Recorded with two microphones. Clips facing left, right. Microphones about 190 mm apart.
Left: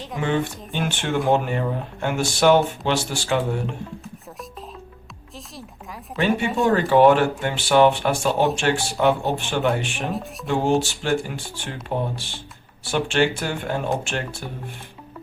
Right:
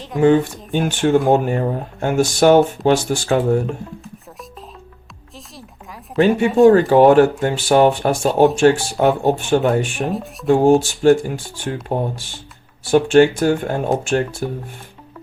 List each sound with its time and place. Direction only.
0.2 s speech: 45° right (ahead or behind)
6.6 s speech: 45° right (ahead or behind)
10.0 s speech: centre (ahead or behind)
10.5 s speech: 45° right (ahead or behind)